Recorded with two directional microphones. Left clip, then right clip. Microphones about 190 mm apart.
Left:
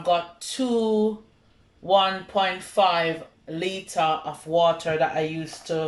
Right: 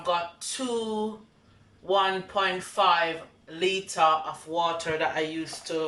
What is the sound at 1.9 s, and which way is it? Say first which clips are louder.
Speech: left 4 dB; 20° left (ahead or behind).